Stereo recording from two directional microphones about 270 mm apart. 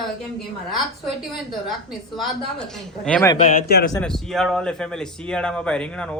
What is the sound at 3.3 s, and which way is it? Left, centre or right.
Speech, left.